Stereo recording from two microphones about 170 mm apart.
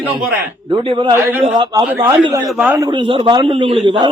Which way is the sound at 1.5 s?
25° right (ahead or behind).